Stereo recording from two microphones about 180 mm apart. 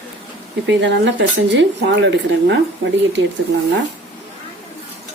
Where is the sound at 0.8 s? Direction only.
75° right (ahead or behind).